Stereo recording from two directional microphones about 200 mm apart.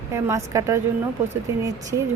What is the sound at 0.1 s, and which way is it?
Speech, 15° right (ahead or behind).